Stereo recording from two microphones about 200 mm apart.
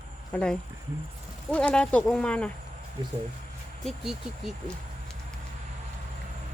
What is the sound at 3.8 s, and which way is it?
Speech, centre (ahead or behind).